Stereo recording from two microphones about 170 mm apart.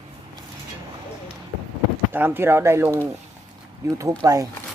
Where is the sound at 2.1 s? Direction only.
10° right (ahead or behind).